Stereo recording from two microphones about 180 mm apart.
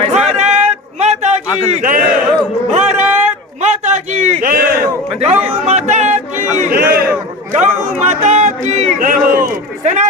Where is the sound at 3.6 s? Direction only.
40° right (ahead or behind); by 4.9 s 55° right (ahead or behind).